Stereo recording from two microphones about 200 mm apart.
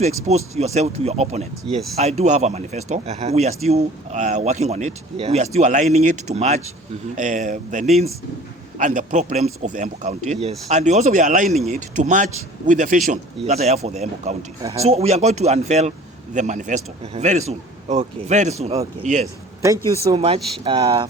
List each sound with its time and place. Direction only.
0.3 s speech: 35° right (ahead or behind)